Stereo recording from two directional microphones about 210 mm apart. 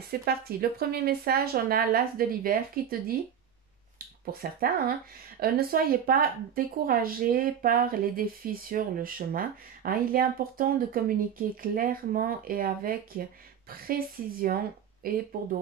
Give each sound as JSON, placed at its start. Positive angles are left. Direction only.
{"t": 0.1, "sound": "a woman's voice", "side_deg": -45}
{"t": 4.3, "sound": "a woman's voice", "side_deg": -45}